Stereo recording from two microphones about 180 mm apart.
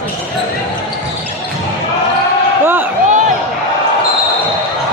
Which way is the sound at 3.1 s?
40° right (ahead or behind).